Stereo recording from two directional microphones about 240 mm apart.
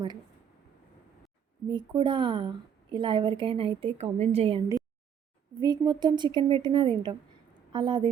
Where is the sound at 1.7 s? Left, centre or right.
Centre.